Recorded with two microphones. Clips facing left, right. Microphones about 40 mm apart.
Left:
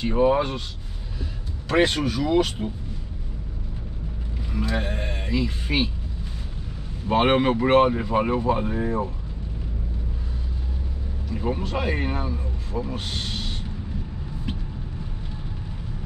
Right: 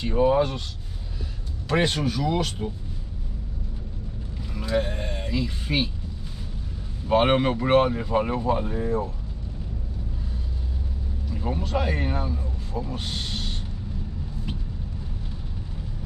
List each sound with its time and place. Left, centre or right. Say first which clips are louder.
0.0 s speech: left 1 dB; centre
1.7 s speech: left 3 dB; centre
4.5 s speech: right 1 dB; centre
7.1 s speech: left 1 dB; centre
11.3 s speech: left 1 dB; centre
12.9 s speech: left 1 dB; centre